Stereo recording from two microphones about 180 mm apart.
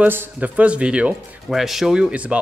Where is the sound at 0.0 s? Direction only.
10° right (ahead or behind).